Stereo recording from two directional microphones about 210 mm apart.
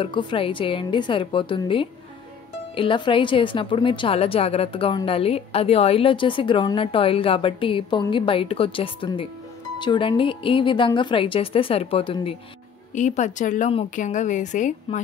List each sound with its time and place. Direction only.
0.0 s a woman's voice: 25° left (ahead or behind)